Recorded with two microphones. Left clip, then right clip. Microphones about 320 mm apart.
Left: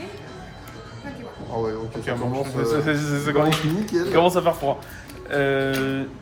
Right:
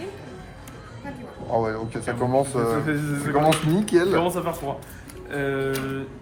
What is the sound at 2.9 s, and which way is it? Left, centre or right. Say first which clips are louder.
Speech: left 3 dB; centre.